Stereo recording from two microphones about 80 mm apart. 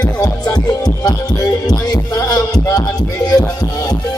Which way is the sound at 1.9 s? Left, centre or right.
Left.